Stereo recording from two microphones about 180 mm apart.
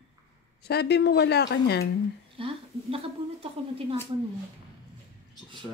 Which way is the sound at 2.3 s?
30° right (ahead or behind).